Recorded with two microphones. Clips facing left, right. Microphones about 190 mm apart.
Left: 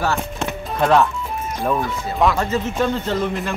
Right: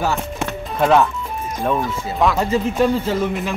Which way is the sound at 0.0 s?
10° right (ahead or behind).